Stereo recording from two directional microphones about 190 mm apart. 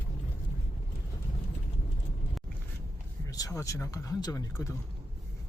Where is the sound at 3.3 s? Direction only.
15° left (ahead or behind).